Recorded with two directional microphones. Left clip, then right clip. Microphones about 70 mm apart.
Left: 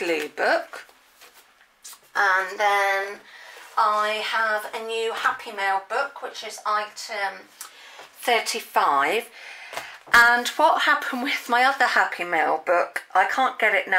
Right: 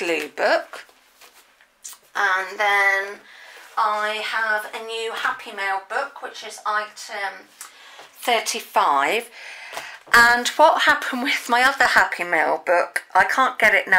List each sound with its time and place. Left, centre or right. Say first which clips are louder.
0.4 s speech: right 3 dB; right
2.1 s speech: even; centre
8.2 s speech: right 1 dB; right